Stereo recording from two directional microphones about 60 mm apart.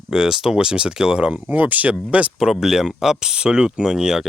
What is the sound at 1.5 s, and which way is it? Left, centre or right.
Speech, right.